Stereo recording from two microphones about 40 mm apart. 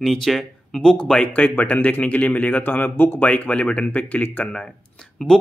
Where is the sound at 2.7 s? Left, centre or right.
Left.